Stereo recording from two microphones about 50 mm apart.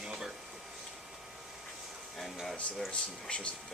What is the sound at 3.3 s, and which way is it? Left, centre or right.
Speech, left.